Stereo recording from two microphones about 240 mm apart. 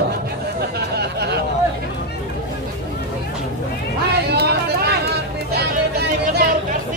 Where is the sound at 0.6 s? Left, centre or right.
Right.